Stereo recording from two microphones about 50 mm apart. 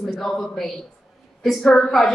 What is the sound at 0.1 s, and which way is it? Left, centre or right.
A woman's voice, centre.